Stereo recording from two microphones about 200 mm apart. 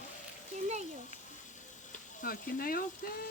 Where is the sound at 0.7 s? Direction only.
35° right (ahead or behind).